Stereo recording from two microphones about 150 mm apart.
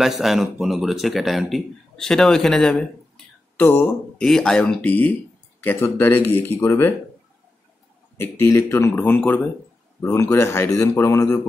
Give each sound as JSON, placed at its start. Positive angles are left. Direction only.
{"t": 0.0, "sound": "speech", "side_deg": 0}
{"t": 3.5, "sound": "speech", "side_deg": 15}
{"t": 8.2, "sound": "speech", "side_deg": 15}